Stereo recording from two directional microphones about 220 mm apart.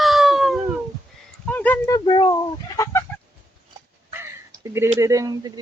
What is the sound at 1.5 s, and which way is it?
Chicken, 10° left (ahead or behind).